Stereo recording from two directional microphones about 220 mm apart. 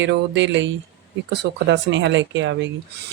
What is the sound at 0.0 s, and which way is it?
Speech, 55° right (ahead or behind).